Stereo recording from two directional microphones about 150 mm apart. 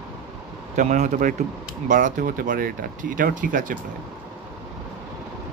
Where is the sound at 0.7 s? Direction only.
55° right (ahead or behind).